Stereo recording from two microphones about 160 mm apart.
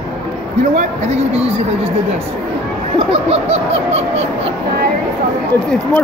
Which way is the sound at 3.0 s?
40° right (ahead or behind).